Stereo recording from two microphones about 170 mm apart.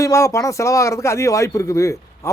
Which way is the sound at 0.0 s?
20° left (ahead or behind).